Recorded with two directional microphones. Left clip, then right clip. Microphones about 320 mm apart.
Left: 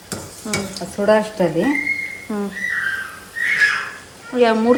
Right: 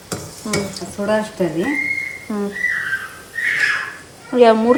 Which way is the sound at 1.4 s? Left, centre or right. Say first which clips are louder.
Left 2 dB; left.